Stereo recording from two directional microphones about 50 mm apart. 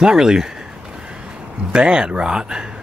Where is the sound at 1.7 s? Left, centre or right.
Centre.